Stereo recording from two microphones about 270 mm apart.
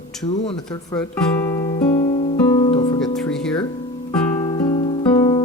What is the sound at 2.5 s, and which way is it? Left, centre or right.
Music, centre.